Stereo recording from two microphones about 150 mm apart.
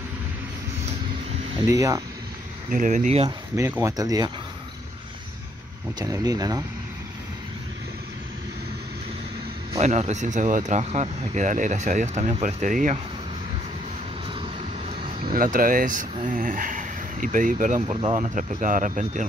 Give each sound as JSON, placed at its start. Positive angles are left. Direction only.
{"t": 1.7, "sound": "speech", "side_deg": -20}
{"t": 2.7, "sound": "speech", "side_deg": -60}
{"t": 3.3, "sound": "speech", "side_deg": -20}
{"t": 5.9, "sound": "speech", "side_deg": -25}
{"t": 9.8, "sound": "speech", "side_deg": -45}
{"t": 15.0, "sound": "a sound", "side_deg": -35}
{"t": 15.3, "sound": "speech", "side_deg": -65}
{"t": 17.8, "sound": "speech", "side_deg": -40}